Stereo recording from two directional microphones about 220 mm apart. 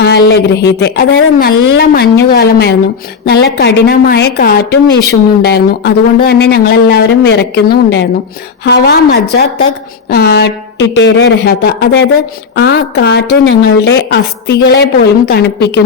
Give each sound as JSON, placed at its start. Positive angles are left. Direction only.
{"t": 0.0, "sound": "a woman's voice", "side_deg": 50}